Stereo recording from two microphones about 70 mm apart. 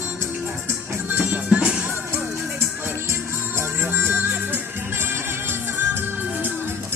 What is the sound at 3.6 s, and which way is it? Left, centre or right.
Music, right.